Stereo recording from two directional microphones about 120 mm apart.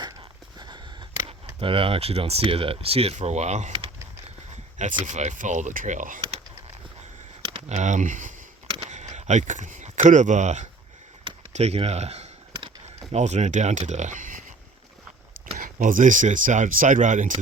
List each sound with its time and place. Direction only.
0.0 s biting: 35° right (ahead or behind)
1.3 s speech: 50° right (ahead or behind)
3.2 s speech: 65° right (ahead or behind)
5.0 s speech: 80° right
7.7 s speech: 85° right
8.6 s a sound: 50° right (ahead or behind)
8.9 s speech: 75° right (ahead or behind)
11.5 s speech: 60° right (ahead or behind); by 14.3 s 90° right
15.8 s speech: 90° right